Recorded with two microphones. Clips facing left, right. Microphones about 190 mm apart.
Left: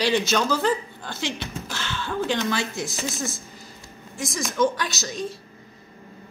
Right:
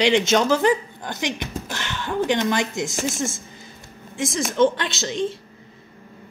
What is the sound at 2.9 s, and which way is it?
Speech, 50° right (ahead or behind).